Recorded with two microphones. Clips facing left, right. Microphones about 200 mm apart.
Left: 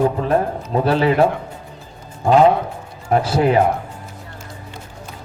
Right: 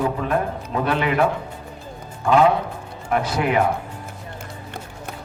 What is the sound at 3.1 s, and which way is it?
Speech, 30° left (ahead or behind).